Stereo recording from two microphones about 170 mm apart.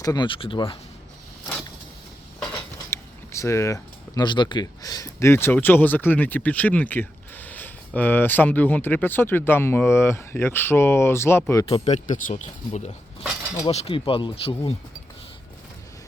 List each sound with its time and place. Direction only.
0.0 s speech: 25° left (ahead or behind)
2.9 s speech: 15° left (ahead or behind)
11.7 s speech: 45° left (ahead or behind)